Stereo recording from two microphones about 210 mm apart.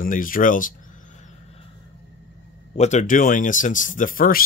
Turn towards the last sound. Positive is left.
turn(degrees=40)  # may be behind; listen again after turning